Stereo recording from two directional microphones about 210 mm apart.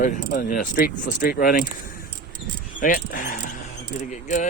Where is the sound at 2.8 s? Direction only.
40° left (ahead or behind).